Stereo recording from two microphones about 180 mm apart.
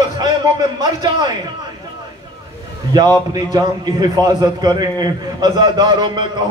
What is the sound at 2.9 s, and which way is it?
A man's voice, 20° right (ahead or behind).